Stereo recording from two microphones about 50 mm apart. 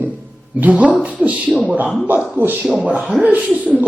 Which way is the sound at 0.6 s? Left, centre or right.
Right.